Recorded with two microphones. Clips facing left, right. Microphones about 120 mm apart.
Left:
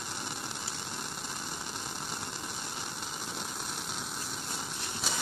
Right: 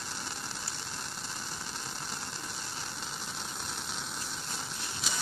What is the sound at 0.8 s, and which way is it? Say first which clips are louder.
Vehicle: left 2 dB; 10° left (ahead or behind).